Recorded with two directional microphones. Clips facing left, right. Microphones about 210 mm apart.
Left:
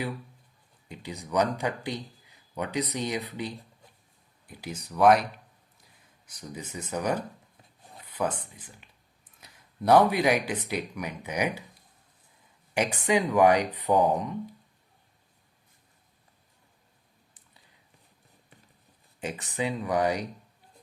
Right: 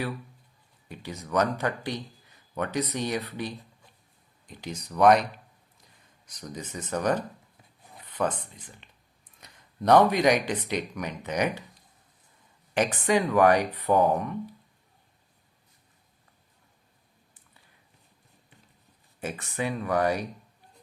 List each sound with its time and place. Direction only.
0.9 s speech: 15° left (ahead or behind)
6.2 s speech: 10° left (ahead or behind)
12.7 s speech: 15° left (ahead or behind)
19.2 s speech: 15° left (ahead or behind)